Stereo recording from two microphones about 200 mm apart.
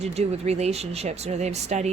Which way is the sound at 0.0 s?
30° right (ahead or behind).